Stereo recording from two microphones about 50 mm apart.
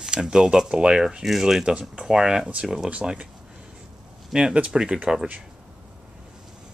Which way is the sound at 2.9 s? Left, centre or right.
Right.